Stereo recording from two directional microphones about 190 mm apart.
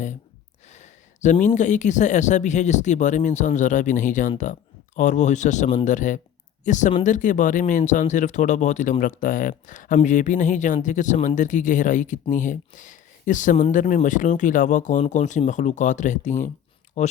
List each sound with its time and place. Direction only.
0.7 s speech: 40° left (ahead or behind)